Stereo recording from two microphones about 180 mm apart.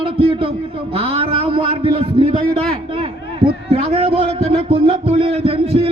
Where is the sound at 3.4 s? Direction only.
35° right (ahead or behind).